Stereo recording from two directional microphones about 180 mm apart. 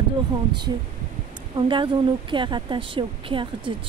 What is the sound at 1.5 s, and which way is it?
A woman's voice, 25° right (ahead or behind).